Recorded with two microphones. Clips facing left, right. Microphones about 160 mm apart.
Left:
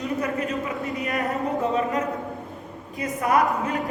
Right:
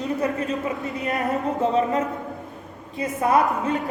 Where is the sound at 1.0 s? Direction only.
20° right (ahead or behind).